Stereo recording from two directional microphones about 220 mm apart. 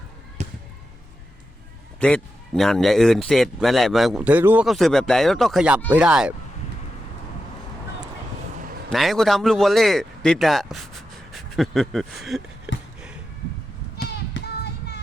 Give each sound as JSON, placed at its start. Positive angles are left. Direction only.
{"t": 0.4, "sound": "basketball bounce", "side_deg": -30}
{"t": 2.0, "sound": "speech", "side_deg": 5}
{"t": 8.9, "sound": "speech", "side_deg": 0}
{"t": 14.3, "sound": "a sound", "side_deg": 50}